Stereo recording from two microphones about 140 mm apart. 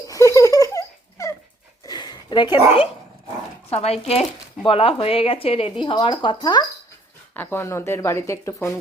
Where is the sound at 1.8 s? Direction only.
30° left (ahead or behind).